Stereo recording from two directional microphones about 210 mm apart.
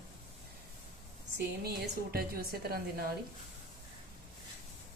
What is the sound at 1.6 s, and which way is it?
A woman's voice, 45° right (ahead or behind).